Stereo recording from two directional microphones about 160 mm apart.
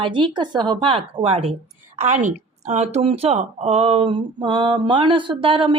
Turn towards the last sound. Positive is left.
turn(degrees=-35)  # may be behind; listen again after turning